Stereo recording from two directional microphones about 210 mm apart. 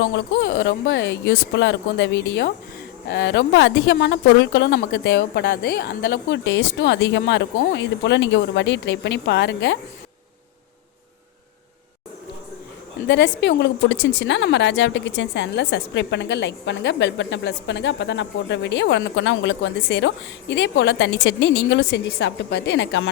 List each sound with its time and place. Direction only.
0.1 s a woman's voice: 55° left (ahead or behind)
13.1 s a woman's voice: 60° left (ahead or behind)